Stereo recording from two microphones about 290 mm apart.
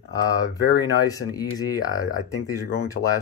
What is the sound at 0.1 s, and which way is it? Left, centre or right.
Speech, centre.